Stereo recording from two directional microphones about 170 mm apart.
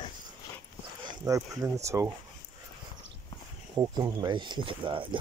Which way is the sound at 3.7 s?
25° right (ahead or behind).